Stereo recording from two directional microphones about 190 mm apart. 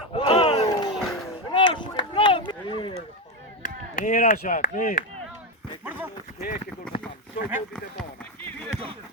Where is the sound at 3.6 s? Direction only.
45° left (ahead or behind).